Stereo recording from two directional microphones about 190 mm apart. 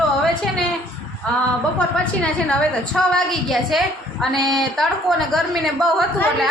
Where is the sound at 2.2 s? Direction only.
5° left (ahead or behind).